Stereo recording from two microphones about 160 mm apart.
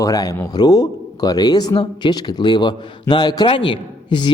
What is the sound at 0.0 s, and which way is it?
A man's voice, 20° left (ahead or behind).